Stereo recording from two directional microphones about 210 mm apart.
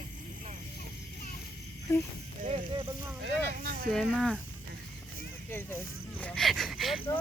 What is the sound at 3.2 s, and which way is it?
Speech, 50° right (ahead or behind).